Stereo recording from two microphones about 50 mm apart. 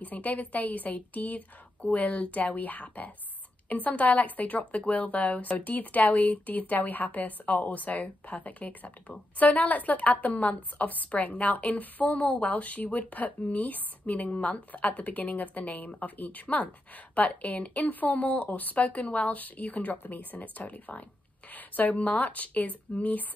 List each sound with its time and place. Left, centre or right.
0.0 s a woman's voice: left